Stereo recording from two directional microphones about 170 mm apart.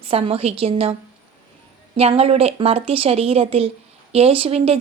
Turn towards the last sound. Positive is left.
turn(degrees=-35)  # may be behind; listen again after turning